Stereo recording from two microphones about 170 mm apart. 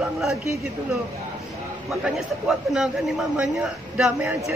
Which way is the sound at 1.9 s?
5° right (ahead or behind).